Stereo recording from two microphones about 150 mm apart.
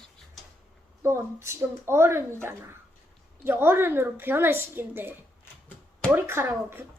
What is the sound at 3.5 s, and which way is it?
A woman's voice, 15° right (ahead or behind).